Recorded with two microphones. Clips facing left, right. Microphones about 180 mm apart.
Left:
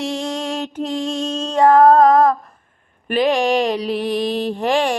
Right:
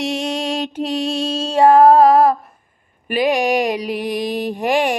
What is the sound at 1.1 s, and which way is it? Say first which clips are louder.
Mantra: right 2 dB; 10° right (ahead or behind).